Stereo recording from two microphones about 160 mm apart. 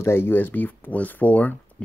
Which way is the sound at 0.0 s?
15° left (ahead or behind).